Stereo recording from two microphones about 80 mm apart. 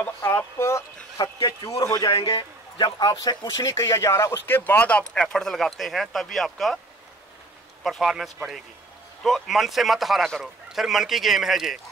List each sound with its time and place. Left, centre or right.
0.2 s speech: left
1.1 s a man's voice: left
3.2 s a man's voice: left
4.5 s speech: left; by 6.8 s centre
7.8 s speech: centre